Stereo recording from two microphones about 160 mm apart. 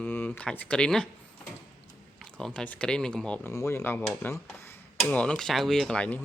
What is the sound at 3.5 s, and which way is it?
Speech, 15° left (ahead or behind).